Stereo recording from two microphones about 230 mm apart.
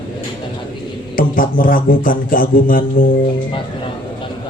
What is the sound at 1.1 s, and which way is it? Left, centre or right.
Mantra, left.